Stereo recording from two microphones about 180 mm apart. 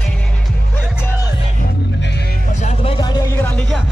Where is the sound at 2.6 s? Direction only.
30° left (ahead or behind); by 3.7 s 10° left (ahead or behind).